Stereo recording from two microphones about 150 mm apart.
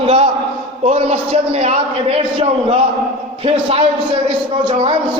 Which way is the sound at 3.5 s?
40° right (ahead or behind).